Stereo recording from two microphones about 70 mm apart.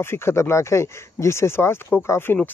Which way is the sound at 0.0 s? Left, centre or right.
Left.